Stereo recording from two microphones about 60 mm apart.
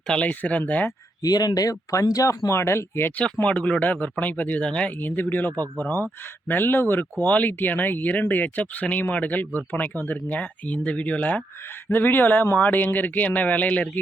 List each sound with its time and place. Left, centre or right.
0.1 s speech: left
1.2 s speech: left
2.5 s speech: left
3.4 s speech: left
4.9 s speech: left